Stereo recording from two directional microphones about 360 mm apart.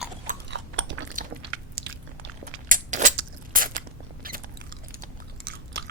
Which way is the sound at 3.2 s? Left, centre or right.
Right.